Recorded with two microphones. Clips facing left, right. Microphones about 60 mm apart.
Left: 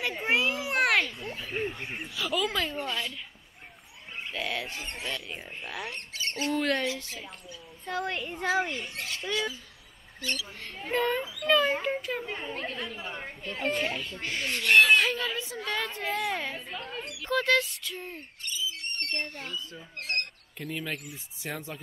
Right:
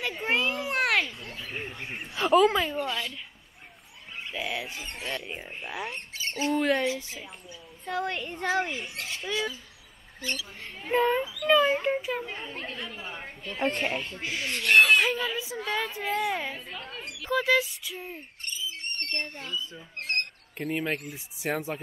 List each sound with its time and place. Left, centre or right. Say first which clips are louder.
0.0 s children playing: even; centre
1.5 s duck: left 4 dB; centre
2.0 s speech: right 10 dB; right
2.6 s speech: right 2 dB; centre
4.3 s speech: even; centre
5.0 s speech: right 3 dB; right
5.4 s speech: right 2 dB; centre
7.8 s speech: right 1 dB; centre
9.1 s speech: even; centre
10.7 s speech: right 4 dB; centre
13.7 s speech: right 1 dB; right
14.1 s speech: even; centre
19.7 s speech: right 2 dB; right
21.1 s speech: right 7 dB; centre